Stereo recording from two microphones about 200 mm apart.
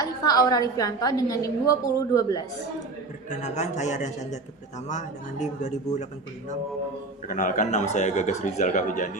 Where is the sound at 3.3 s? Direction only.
35° left (ahead or behind).